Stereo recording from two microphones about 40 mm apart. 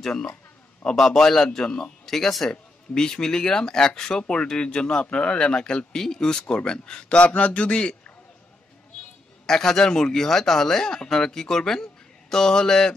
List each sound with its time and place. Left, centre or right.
0.0 s speech: centre
9.5 s a man's voice: centre